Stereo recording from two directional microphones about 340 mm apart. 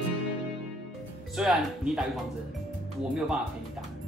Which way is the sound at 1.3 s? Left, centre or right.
Centre.